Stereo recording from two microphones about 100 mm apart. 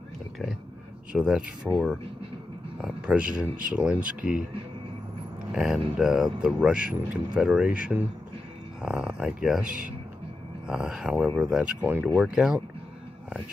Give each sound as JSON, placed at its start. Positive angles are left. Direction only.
{"t": 1.1, "sound": "speech", "side_deg": -10}
{"t": 2.8, "sound": "speech", "side_deg": -10}
{"t": 5.5, "sound": "speech", "side_deg": -5}
{"t": 10.7, "sound": "speech", "side_deg": -5}
{"t": 12.1, "sound": "speech", "side_deg": -5}